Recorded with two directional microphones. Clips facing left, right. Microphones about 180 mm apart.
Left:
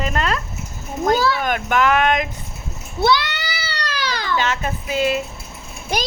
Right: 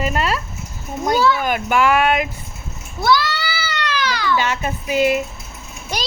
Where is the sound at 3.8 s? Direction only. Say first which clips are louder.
Right 3 dB; 40° left (ahead or behind).